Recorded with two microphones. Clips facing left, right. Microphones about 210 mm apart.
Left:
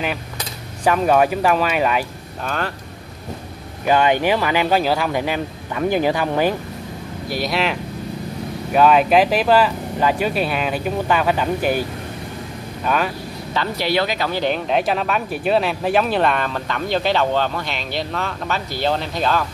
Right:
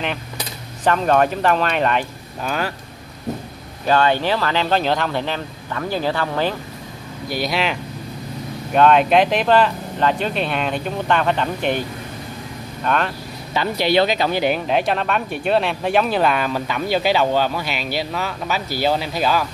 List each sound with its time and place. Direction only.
0.8 s speech: 10° left (ahead or behind)
2.4 s speech: 5° right (ahead or behind)
3.8 s speech: 15° left (ahead or behind)
7.2 s speech: centre (ahead or behind)
12.8 s speech: 5° left (ahead or behind)
13.5 s speech: 15° right (ahead or behind)
14.4 s speech: 5° right (ahead or behind)